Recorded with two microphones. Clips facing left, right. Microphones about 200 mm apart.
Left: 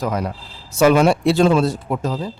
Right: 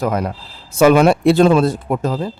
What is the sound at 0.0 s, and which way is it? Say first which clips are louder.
Speech: right 3 dB; 55° right (ahead or behind).